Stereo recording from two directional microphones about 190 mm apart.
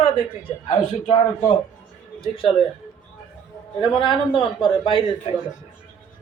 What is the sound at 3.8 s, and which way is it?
A man's voice, 25° left (ahead or behind).